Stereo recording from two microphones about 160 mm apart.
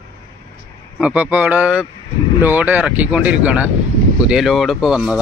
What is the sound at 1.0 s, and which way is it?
Speech, 10° right (ahead or behind).